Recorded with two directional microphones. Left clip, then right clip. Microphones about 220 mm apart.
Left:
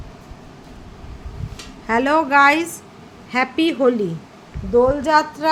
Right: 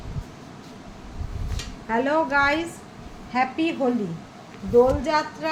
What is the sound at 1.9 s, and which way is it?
Speech, 55° left (ahead or behind).